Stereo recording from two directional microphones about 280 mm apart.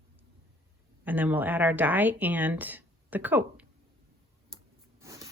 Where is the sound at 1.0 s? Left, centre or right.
Centre.